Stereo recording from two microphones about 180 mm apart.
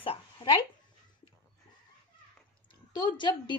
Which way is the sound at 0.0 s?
30° left (ahead or behind).